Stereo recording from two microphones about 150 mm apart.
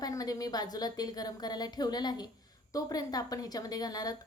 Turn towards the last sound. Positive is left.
turn(degrees=25)  # may be behind; listen again after turning